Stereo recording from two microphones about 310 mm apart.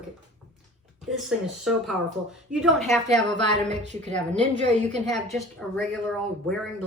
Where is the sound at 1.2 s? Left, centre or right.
Centre.